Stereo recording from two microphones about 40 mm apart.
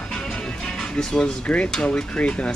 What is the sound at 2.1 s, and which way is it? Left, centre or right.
Speech, left.